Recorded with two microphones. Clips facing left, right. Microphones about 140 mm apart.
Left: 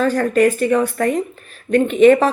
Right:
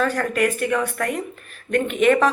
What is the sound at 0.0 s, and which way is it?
Speech, 35° left (ahead or behind).